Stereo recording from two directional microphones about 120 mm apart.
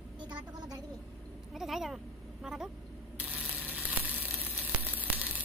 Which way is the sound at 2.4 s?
5° right (ahead or behind).